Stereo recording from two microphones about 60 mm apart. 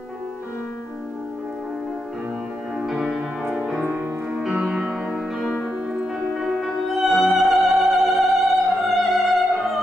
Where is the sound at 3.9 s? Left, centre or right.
Right.